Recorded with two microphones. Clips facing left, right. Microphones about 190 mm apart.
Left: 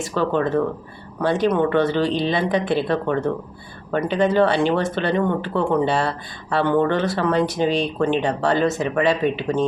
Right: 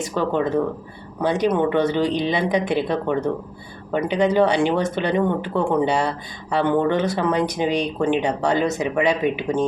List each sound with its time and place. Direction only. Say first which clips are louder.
0.1 s speech: left 1 dB; 15° right (ahead or behind)